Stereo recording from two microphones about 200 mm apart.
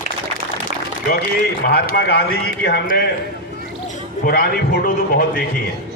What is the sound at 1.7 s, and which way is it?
A man's voice, 50° left (ahead or behind).